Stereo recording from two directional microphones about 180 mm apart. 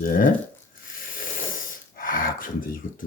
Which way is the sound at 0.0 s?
50° left (ahead or behind).